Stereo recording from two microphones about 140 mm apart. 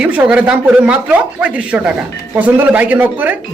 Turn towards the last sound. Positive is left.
turn(degrees=-10)  # may be behind; listen again after turning